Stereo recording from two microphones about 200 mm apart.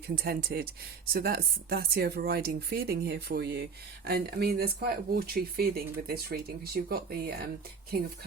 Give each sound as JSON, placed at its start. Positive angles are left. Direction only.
{"t": 0.2, "sound": "speech", "side_deg": -50}